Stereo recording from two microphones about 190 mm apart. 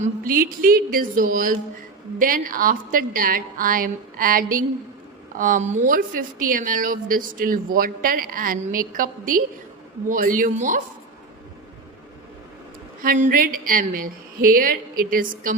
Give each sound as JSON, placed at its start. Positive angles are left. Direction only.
{"t": 0.0, "sound": "a woman's voice", "side_deg": -50}
{"t": 13.0, "sound": "a woman's voice", "side_deg": -45}